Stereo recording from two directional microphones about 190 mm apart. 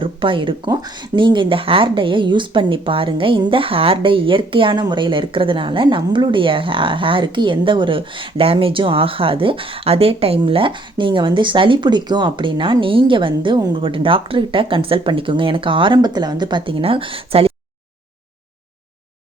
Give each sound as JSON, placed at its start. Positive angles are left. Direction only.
{"t": 0.0, "sound": "speech", "side_deg": -25}